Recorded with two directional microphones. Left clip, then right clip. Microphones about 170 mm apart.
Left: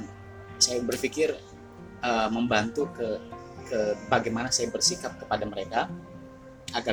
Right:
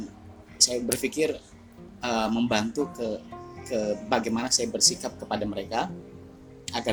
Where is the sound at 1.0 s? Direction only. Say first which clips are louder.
Even; 40° right (ahead or behind).